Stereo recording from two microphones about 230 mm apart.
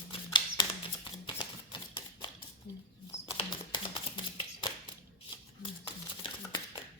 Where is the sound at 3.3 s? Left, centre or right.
Centre.